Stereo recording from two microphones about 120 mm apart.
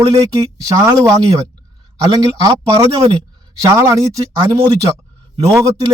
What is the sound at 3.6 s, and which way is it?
A man's voice, 30° right (ahead or behind).